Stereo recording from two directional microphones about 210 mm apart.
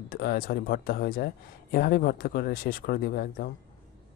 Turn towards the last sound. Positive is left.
turn(degrees=45)  # may be behind; listen again after turning